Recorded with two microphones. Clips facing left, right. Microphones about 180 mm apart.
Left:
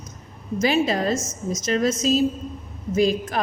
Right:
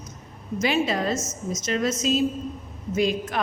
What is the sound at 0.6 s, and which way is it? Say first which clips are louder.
A woman's voice: left 3 dB; 40° left (ahead or behind).